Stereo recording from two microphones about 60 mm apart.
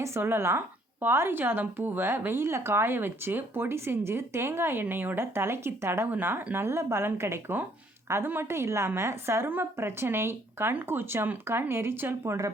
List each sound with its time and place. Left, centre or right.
0.0 s a woman's voice: right